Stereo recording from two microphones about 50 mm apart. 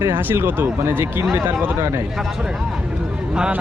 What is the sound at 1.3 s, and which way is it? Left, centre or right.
Speech, right.